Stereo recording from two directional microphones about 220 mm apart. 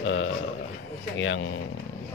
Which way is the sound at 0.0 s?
60° left (ahead or behind).